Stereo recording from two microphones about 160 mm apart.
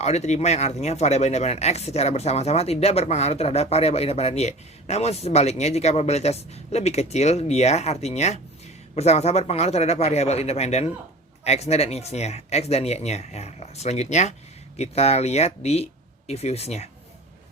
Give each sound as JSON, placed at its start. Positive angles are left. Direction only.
{"t": 0.0, "sound": "speech", "side_deg": 45}